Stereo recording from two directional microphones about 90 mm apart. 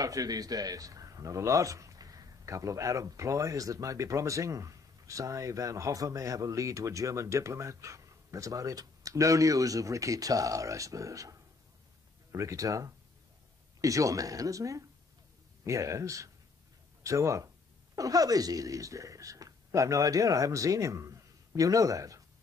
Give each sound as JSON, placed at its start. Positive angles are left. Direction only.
{"t": 0.0, "sound": "speech", "side_deg": -40}